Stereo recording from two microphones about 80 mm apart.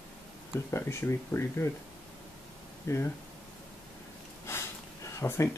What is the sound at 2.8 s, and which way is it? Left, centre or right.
Speech, left.